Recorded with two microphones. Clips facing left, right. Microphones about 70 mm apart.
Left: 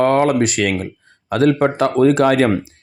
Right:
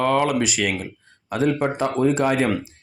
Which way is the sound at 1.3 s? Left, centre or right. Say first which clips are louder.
Left 6 dB; left.